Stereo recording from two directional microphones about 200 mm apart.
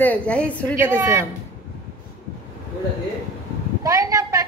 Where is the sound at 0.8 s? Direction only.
10° right (ahead or behind).